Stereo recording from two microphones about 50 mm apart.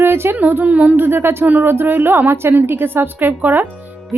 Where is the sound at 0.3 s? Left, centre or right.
Right.